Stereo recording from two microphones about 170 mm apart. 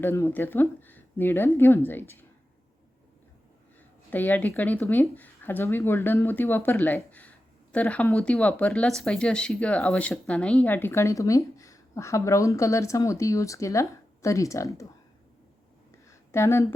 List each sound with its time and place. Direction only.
0.0 s speech: 15° left (ahead or behind)
4.1 s speech: 10° left (ahead or behind)
16.0 s a sound: 15° left (ahead or behind)